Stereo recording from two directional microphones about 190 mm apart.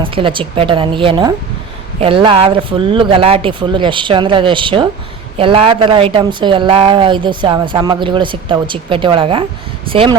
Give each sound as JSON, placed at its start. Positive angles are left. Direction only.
{"t": 0.0, "sound": "a woman's voice", "side_deg": -25}